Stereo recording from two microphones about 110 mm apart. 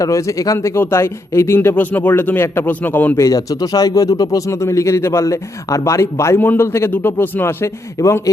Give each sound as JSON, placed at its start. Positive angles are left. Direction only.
{"t": 0.0, "sound": "speech", "side_deg": 30}
{"t": 3.2, "sound": "speech", "side_deg": 35}